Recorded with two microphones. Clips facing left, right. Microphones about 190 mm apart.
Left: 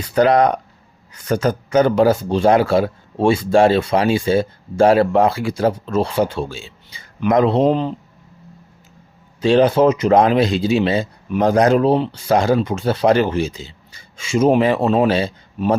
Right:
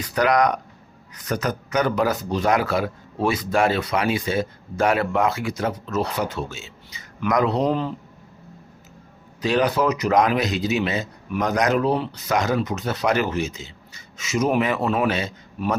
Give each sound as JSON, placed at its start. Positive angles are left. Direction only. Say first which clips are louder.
{"t": 0.0, "sound": "speech", "louder": "left 5 dB", "side_deg": 30}
{"t": 9.4, "sound": "speech", "louder": "left 7 dB", "side_deg": 30}